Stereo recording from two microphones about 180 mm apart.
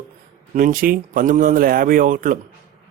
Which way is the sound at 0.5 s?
50° right (ahead or behind).